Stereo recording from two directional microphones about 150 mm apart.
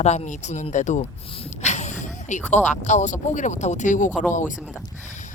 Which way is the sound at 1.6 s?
50° left (ahead or behind).